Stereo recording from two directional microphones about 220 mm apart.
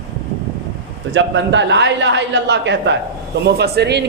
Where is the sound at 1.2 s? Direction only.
55° right (ahead or behind).